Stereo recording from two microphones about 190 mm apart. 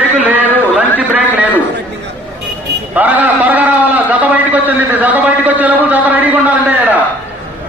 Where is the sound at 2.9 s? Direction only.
10° right (ahead or behind).